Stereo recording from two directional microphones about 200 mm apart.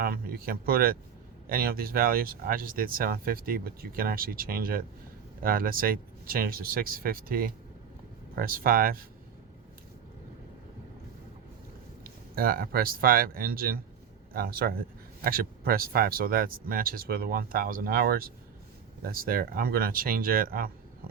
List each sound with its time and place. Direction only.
0.0 s speech: 50° right (ahead or behind)
12.0 s speech: 45° right (ahead or behind)